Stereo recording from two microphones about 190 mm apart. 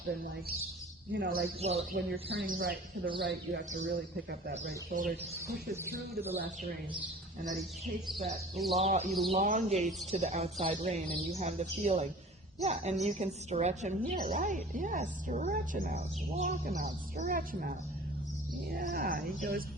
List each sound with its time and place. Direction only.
1.1 s speech: 60° right (ahead or behind)
3.2 s speech: 60° right (ahead or behind)
3.7 s a woman's voice: 40° right (ahead or behind)
5.7 s speech: 10° right (ahead or behind)
8.5 s speech: centre (ahead or behind)
8.8 s a woman's voice: 35° right (ahead or behind)
16.6 s speech: 55° right (ahead or behind)
17.2 s speech: 45° right (ahead or behind)